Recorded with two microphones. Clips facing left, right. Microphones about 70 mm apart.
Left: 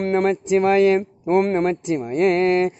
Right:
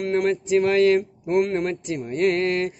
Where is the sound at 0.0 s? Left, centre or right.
Left.